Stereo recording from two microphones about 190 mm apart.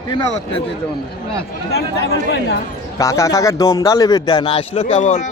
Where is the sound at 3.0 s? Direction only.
15° left (ahead or behind).